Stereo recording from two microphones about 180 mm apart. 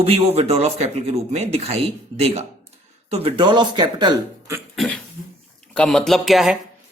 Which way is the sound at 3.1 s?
30° right (ahead or behind).